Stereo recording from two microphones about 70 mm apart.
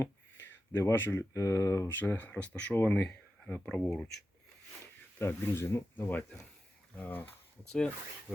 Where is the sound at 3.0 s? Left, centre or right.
Centre.